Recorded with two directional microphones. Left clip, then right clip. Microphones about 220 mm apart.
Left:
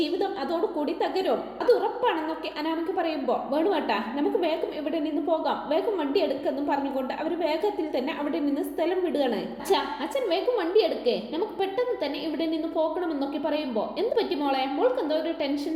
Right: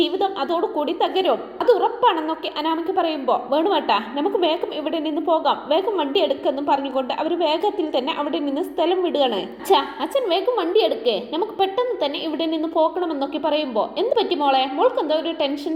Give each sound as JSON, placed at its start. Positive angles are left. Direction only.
{"t": 1.2, "sound": "a woman's voice", "side_deg": -20}
{"t": 3.2, "sound": "a woman's voice", "side_deg": -20}
{"t": 3.8, "sound": "a woman's voice", "side_deg": 5}
{"t": 5.3, "sound": "a woman's voice", "side_deg": -20}
{"t": 9.1, "sound": "a woman's voice", "side_deg": -20}
{"t": 11.3, "sound": "a woman's voice", "side_deg": -15}